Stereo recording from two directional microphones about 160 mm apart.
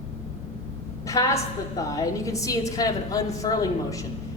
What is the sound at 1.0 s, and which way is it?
A woman's voice, 20° left (ahead or behind).